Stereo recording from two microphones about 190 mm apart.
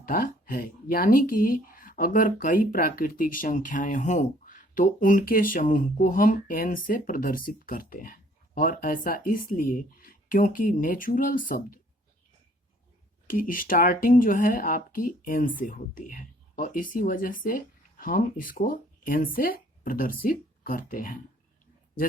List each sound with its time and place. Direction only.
0.0 s speech: 50° left (ahead or behind)
13.2 s speech: 45° left (ahead or behind)